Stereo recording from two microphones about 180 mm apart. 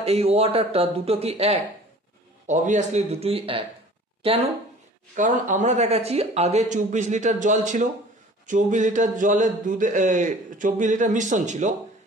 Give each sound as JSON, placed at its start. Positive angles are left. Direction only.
{"t": 0.0, "sound": "speech", "side_deg": -35}
{"t": 5.1, "sound": "speech", "side_deg": -45}